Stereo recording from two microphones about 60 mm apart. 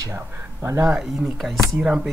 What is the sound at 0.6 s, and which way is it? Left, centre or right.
Speech, right.